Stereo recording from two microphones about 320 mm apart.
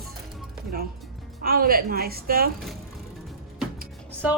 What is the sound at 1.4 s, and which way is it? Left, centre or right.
A woman's voice, right.